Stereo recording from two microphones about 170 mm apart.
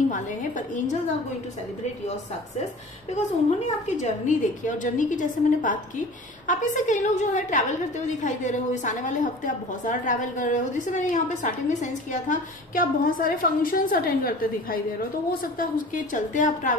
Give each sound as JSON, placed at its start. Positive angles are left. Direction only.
{"t": 0.1, "sound": "a woman's voice", "side_deg": 50}
{"t": 3.4, "sound": "a woman's voice", "side_deg": 40}